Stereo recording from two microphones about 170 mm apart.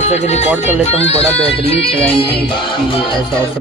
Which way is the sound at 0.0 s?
40° left (ahead or behind).